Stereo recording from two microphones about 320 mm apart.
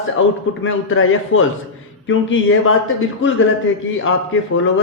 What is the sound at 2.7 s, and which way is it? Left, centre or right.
A man's voice, left.